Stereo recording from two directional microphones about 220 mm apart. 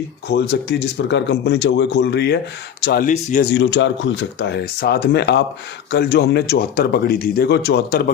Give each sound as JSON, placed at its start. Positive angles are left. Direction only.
{"t": 0.3, "sound": "speech", "side_deg": 50}
{"t": 3.5, "sound": "speech", "side_deg": 55}